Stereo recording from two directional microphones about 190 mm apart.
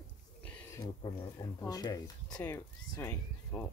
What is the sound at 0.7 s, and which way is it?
Speech, 25° left (ahead or behind).